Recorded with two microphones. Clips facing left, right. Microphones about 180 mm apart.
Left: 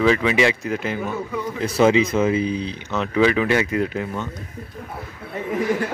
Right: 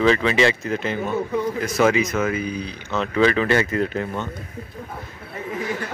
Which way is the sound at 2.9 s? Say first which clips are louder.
Even; 10° left (ahead or behind).